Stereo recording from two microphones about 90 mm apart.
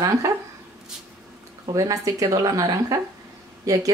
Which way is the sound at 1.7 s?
40° right (ahead or behind).